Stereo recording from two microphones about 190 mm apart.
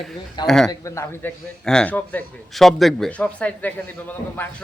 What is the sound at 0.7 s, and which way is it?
A man's voice, 15° left (ahead or behind).